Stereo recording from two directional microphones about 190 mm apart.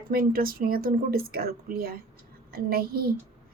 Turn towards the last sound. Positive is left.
turn(degrees=-50)  # may be behind; listen again after turning